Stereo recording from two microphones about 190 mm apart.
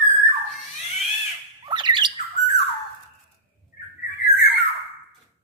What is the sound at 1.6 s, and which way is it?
Squawk, 25° right (ahead or behind).